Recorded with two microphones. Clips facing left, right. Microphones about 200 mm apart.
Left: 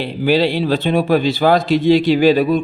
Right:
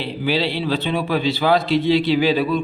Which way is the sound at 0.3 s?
45° left (ahead or behind).